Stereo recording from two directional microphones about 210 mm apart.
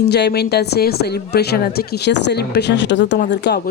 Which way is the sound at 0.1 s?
50° left (ahead or behind).